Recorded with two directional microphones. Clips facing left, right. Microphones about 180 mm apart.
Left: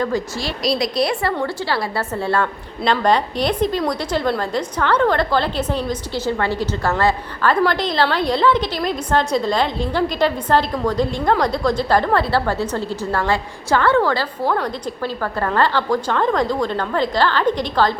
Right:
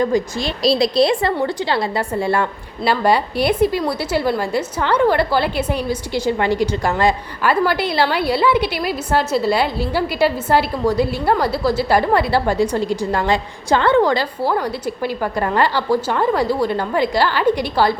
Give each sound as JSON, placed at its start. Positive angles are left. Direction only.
{"t": 0.0, "sound": "a woman's voice", "side_deg": -20}
{"t": 0.6, "sound": "a woman's voice", "side_deg": -30}